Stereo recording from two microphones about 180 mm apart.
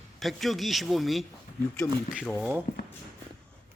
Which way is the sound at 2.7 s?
55° left (ahead or behind).